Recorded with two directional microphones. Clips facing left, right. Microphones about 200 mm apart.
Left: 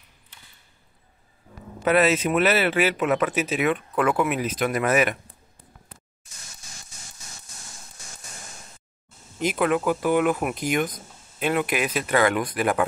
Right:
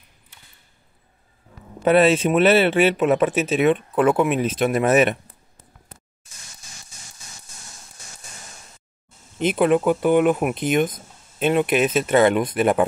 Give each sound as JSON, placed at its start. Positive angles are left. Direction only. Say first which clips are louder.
{"t": 1.9, "sound": "speech", "louder": "right 4 dB", "side_deg": -30}
{"t": 9.4, "sound": "speech", "louder": "right 5 dB", "side_deg": -25}